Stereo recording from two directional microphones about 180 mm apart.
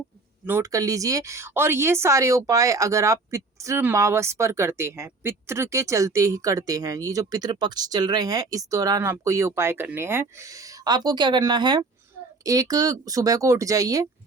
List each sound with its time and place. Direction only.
0.4 s speech: 15° right (ahead or behind)